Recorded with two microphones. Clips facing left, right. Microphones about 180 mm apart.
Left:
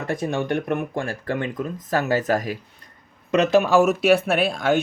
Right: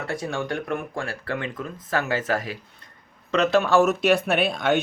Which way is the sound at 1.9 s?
40° left (ahead or behind).